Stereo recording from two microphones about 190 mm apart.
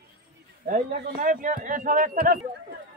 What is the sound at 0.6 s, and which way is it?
A man's voice, 45° right (ahead or behind).